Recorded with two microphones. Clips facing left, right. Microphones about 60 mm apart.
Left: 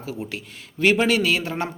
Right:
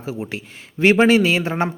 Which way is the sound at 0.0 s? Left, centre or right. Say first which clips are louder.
Right 3 dB; right.